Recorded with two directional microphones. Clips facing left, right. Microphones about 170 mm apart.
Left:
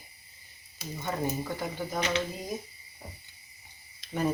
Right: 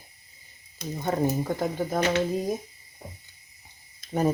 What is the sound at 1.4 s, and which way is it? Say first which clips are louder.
Speech: right 6 dB; 45° right (ahead or behind).